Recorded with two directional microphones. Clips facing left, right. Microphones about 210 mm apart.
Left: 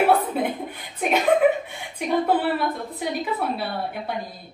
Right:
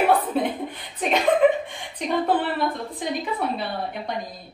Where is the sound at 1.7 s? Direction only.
10° left (ahead or behind).